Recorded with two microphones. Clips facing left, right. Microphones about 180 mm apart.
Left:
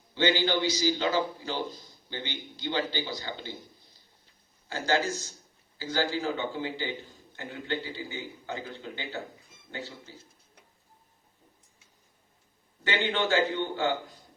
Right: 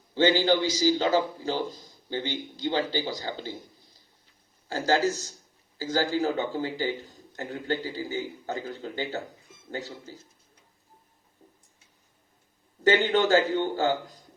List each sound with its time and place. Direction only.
0.1 s a man's voice: 40° right (ahead or behind)
4.7 s a man's voice: 40° right (ahead or behind)
12.8 s a man's voice: 40° right (ahead or behind)